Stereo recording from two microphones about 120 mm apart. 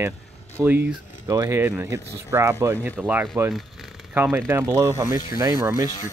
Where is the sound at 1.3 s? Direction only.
25° right (ahead or behind).